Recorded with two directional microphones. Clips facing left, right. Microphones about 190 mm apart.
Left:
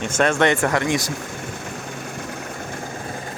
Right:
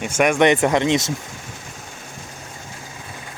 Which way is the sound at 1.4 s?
65° left (ahead or behind).